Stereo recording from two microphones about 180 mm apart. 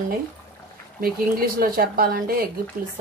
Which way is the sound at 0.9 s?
55° right (ahead or behind).